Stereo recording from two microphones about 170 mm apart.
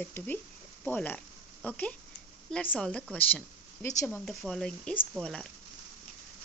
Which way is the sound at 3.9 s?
20° left (ahead or behind).